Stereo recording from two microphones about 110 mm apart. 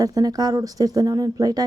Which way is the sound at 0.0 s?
35° right (ahead or behind).